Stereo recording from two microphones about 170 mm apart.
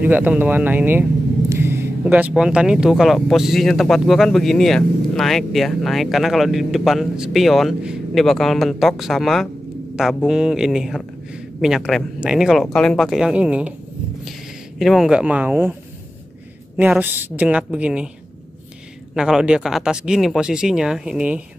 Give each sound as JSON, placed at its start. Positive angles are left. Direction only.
{"t": 0.0, "sound": "a woman's voice", "side_deg": -10}
{"t": 14.8, "sound": "a woman's voice", "side_deg": 0}
{"t": 16.7, "sound": "a woman's voice", "side_deg": -10}
{"t": 19.1, "sound": "speech", "side_deg": -5}